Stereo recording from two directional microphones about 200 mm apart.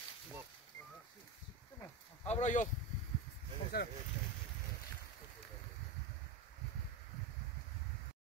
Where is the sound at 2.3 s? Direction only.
35° left (ahead or behind).